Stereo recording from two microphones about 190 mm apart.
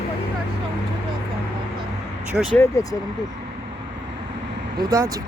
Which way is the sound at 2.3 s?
Centre (ahead or behind).